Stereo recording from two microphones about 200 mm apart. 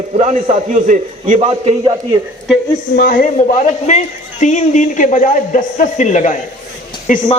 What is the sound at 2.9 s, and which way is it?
A man's voice, 45° left (ahead or behind).